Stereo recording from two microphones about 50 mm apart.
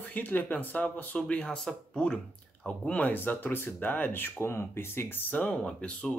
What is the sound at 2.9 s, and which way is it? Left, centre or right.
A man's voice, left.